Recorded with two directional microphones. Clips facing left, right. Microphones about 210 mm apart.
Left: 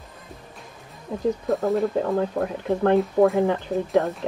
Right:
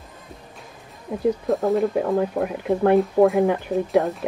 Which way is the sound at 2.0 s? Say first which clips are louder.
Right 2 dB; 15° right (ahead or behind).